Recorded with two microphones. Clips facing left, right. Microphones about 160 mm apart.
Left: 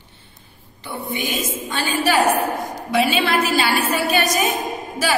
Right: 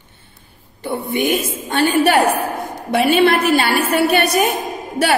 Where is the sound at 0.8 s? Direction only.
55° right (ahead or behind).